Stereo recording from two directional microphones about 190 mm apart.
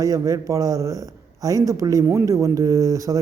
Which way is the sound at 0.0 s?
15° right (ahead or behind).